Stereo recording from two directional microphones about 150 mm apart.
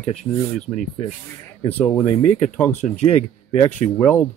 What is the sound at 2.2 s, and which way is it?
Speech, 55° left (ahead or behind).